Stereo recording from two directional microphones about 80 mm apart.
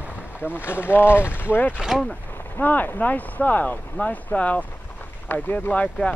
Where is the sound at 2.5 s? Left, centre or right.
Left.